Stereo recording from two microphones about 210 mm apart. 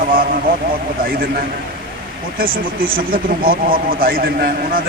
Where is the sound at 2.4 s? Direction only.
45° right (ahead or behind).